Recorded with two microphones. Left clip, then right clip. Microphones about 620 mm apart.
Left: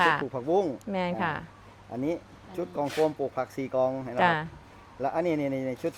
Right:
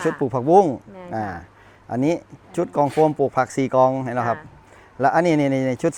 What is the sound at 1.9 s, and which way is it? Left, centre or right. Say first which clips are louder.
Speech: right 10 dB; right.